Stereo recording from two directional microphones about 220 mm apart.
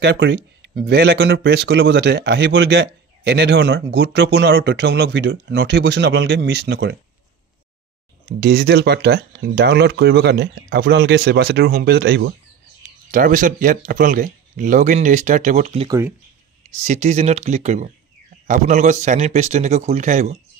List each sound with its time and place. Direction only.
0.0 s speech: 50° right (ahead or behind)
8.4 s speech: 45° right (ahead or behind)
13.1 s speech: 35° right (ahead or behind)